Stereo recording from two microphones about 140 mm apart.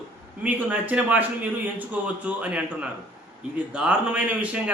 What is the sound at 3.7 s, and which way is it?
Speech, 10° right (ahead or behind).